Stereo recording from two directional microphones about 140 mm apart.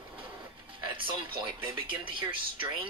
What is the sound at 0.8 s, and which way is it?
Speech, 35° right (ahead or behind).